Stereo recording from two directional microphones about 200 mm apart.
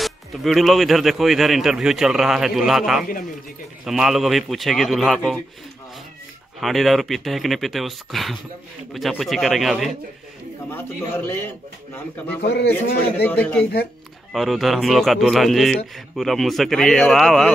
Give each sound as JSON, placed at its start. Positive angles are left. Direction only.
{"t": 0.0, "sound": "speech", "side_deg": 0}
{"t": 6.6, "sound": "speech", "side_deg": 0}
{"t": 10.7, "sound": "a man's voice", "side_deg": 10}
{"t": 12.4, "sound": "a man's voice", "side_deg": 55}
{"t": 13.2, "sound": "a man's voice", "side_deg": 10}